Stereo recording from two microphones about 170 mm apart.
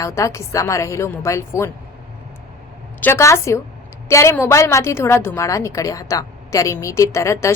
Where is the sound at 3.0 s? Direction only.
15° left (ahead or behind).